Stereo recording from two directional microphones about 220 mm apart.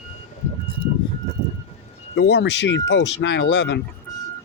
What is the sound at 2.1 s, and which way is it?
Speech, 50° left (ahead or behind).